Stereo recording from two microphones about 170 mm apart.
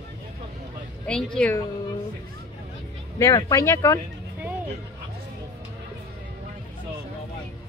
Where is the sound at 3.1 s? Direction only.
20° left (ahead or behind).